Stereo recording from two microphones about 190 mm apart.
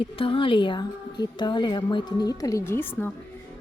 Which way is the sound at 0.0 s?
30° left (ahead or behind).